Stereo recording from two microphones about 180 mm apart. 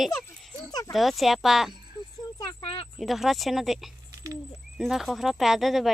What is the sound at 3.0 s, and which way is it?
Speech, centre (ahead or behind).